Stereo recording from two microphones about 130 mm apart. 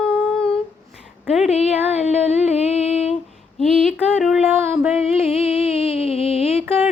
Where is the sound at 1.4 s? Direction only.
55° left (ahead or behind).